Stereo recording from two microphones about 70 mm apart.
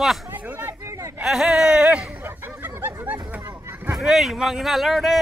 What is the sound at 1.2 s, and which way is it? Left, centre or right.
Speech, centre.